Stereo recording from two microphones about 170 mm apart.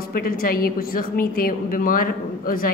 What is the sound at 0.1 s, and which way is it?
A woman's voice, 60° left (ahead or behind).